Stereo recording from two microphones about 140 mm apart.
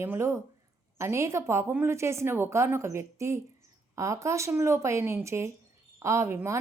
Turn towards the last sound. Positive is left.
turn(degrees=-20)  # may be behind; listen again after turning